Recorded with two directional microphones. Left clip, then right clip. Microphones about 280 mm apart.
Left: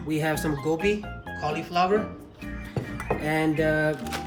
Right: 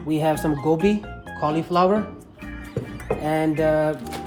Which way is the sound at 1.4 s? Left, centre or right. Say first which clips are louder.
Right 5 dB; centre.